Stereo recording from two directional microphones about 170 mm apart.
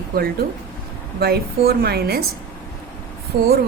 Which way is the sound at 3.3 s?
60° right (ahead or behind).